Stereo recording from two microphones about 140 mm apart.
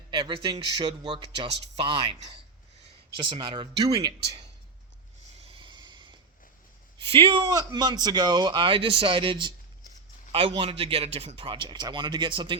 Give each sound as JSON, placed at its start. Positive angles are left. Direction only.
{"t": 0.1, "sound": "a man's voice", "side_deg": -30}
{"t": 5.5, "sound": "a sound", "side_deg": -35}
{"t": 7.0, "sound": "a man's voice", "side_deg": -40}
{"t": 7.5, "sound": "a man's voice", "side_deg": -30}